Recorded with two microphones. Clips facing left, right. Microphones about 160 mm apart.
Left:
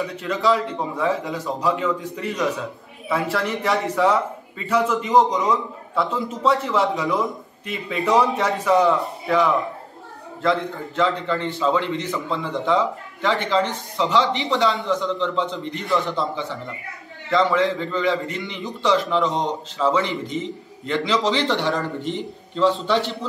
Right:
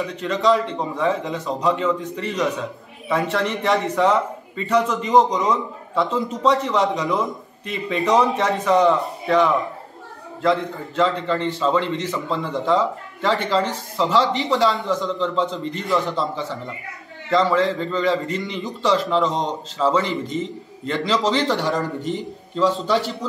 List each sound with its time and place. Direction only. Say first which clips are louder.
0.0 s a man's voice: right 2 dB; 5° left (ahead or behind)
22.0 s a man's voice: right 1 dB; 40° right (ahead or behind)